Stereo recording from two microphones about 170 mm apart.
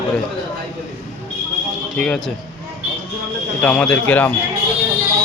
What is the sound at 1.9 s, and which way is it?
Speech, 5° left (ahead or behind).